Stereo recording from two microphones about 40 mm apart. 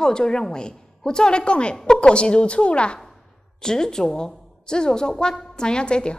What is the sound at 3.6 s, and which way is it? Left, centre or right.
A woman's voice, centre.